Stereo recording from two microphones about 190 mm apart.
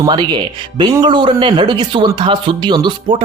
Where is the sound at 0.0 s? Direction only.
20° right (ahead or behind).